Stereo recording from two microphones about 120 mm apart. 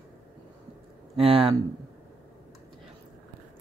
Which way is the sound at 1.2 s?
50° right (ahead or behind).